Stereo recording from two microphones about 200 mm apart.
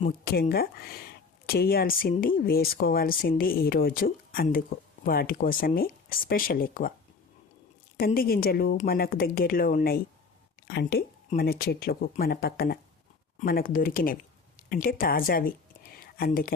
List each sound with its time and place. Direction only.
0.3 s speech: 50° left (ahead or behind)
7.9 s speech: 45° left (ahead or behind)
16.0 s a sound: 45° left (ahead or behind)